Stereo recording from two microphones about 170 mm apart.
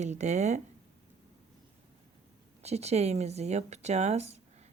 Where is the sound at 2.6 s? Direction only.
40° right (ahead or behind).